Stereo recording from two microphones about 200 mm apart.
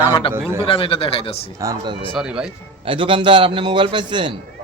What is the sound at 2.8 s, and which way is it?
A man's voice, 25° right (ahead or behind).